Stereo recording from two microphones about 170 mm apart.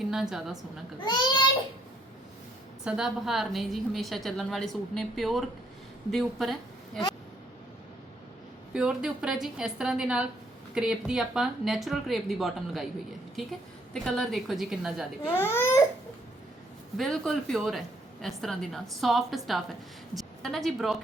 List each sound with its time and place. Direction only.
0.0 s a woman's voice: centre (ahead or behind)
1.0 s a child's voice: 25° left (ahead or behind)
2.8 s a woman's voice: 5° right (ahead or behind)
8.7 s a woman's voice: 5° right (ahead or behind)
13.9 s a woman's voice: 5° left (ahead or behind)
15.4 s speech: 15° left (ahead or behind)
17.0 s a woman's voice: centre (ahead or behind)